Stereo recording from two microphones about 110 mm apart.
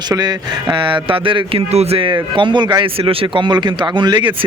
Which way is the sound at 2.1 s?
45° right (ahead or behind).